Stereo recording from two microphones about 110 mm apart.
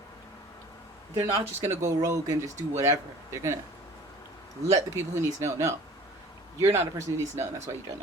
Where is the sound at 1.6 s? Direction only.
25° right (ahead or behind).